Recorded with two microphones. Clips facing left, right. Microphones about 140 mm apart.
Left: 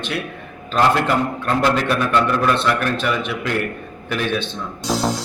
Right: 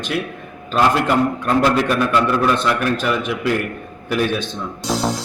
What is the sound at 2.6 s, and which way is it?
Speech, 5° right (ahead or behind).